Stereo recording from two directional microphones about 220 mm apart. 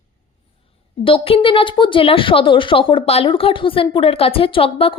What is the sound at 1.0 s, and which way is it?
Speech, 25° left (ahead or behind).